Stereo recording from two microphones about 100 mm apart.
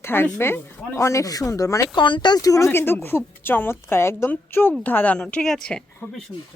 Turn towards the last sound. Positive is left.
turn(degrees=5)  # may be behind; listen again after turning